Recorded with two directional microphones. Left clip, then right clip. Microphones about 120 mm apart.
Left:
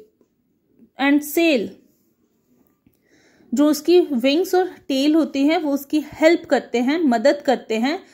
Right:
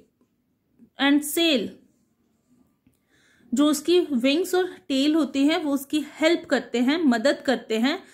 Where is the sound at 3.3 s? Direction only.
35° left (ahead or behind).